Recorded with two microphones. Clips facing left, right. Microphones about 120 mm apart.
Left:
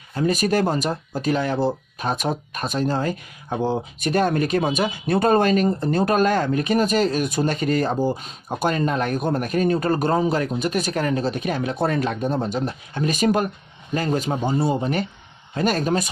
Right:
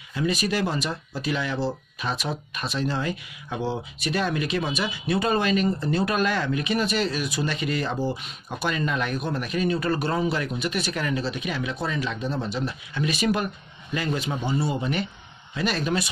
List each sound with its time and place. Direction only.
0.1 s speech: 45° left (ahead or behind)